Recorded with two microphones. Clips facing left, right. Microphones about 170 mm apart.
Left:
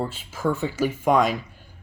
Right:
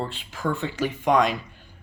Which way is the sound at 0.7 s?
45° left (ahead or behind).